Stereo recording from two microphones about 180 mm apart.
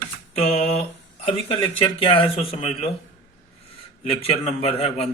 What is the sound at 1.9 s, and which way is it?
Speech, 30° left (ahead or behind).